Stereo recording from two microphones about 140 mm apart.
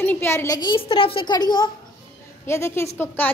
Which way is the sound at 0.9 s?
40° left (ahead or behind).